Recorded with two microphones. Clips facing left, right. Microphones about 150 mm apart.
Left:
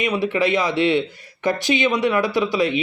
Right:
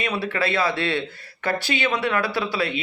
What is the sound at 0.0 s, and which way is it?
Speech, 15° left (ahead or behind).